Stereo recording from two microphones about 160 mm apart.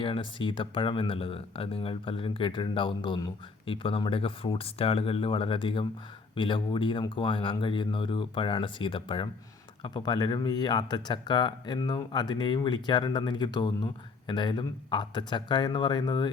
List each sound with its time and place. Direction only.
0.0 s speech: 30° left (ahead or behind)